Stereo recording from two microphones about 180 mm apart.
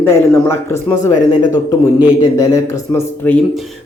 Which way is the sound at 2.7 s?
10° left (ahead or behind).